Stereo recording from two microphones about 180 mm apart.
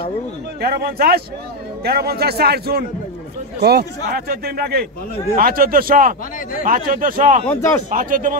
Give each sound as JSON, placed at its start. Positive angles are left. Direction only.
{"t": 0.6, "sound": "a man's voice", "side_deg": -60}
{"t": 7.4, "sound": "speech", "side_deg": 15}
{"t": 7.9, "sound": "a man's voice", "side_deg": -50}